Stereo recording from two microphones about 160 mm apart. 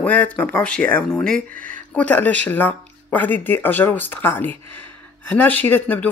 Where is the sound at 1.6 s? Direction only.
55° right (ahead or behind).